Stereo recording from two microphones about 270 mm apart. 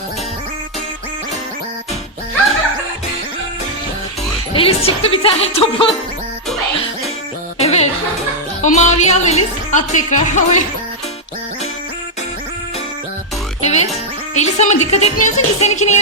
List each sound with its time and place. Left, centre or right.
4.5 s speech: left
7.6 s music: left
8.6 s speech: left
13.6 s speech: left